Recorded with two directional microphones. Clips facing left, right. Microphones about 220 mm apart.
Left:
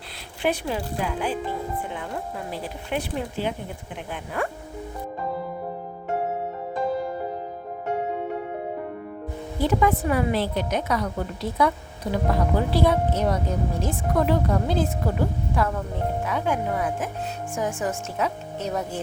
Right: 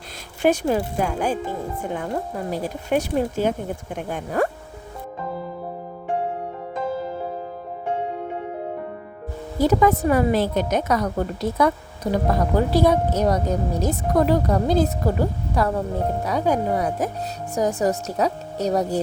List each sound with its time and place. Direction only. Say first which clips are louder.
0.4 s a woman's voice: right 6 dB; 45° right (ahead or behind)
9.6 s a woman's voice: right 4 dB; 40° right (ahead or behind)